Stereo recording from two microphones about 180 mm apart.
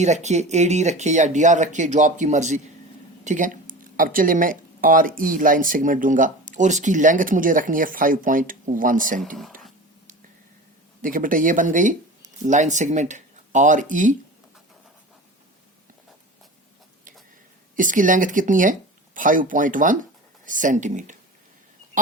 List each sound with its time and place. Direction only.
0.0 s speech: 40° right (ahead or behind)
11.0 s speech: 50° right (ahead or behind)
17.7 s speech: 45° right (ahead or behind)